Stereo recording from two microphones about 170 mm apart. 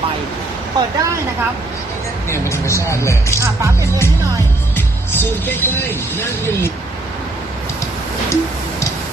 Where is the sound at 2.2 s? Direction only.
15° left (ahead or behind).